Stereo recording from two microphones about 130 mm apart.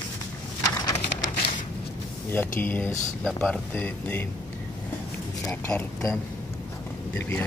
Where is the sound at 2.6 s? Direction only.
15° left (ahead or behind).